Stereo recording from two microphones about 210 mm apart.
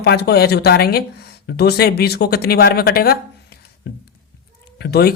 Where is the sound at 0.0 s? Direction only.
50° left (ahead or behind).